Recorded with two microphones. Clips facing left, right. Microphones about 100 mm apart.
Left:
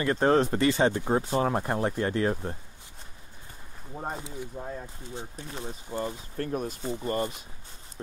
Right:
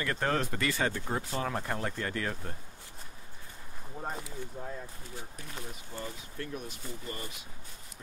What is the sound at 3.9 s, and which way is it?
Speech, 25° left (ahead or behind).